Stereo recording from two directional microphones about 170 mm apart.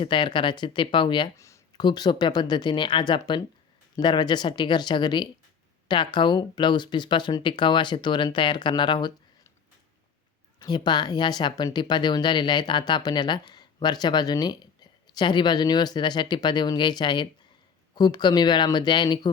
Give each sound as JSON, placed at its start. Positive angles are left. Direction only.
{"t": 0.0, "sound": "speech", "side_deg": 30}
{"t": 10.6, "sound": "speech", "side_deg": 25}